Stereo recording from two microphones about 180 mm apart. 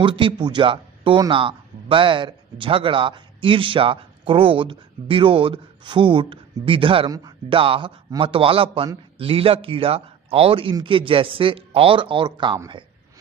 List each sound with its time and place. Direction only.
0.0 s speech: 25° right (ahead or behind)